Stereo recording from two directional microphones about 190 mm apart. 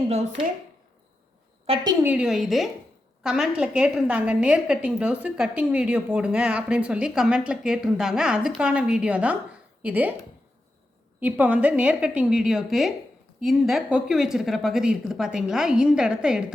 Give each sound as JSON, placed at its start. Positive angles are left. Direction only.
{"t": 1.6, "sound": "a woman's voice", "side_deg": -25}
{"t": 2.0, "sound": "a woman's voice", "side_deg": -5}
{"t": 11.2, "sound": "a woman's voice", "side_deg": -10}